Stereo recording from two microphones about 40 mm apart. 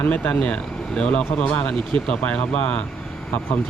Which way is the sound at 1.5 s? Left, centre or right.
Left.